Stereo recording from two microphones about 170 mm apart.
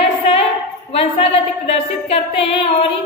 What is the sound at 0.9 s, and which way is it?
A woman's voice, 35° left (ahead or behind).